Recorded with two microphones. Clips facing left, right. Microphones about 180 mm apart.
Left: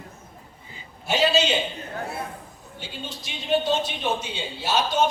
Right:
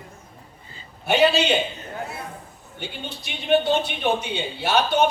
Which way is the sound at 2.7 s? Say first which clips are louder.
Right 2 dB; 60° right (ahead or behind).